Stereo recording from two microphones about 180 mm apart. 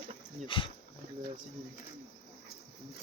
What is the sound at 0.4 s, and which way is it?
Speech, 30° left (ahead or behind).